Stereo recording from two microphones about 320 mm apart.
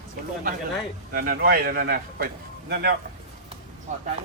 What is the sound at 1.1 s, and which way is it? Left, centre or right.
Speech, right.